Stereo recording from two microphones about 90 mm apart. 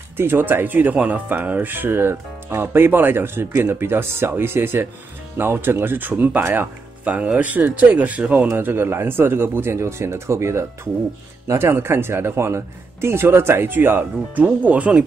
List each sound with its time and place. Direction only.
0.2 s speech: 25° right (ahead or behind)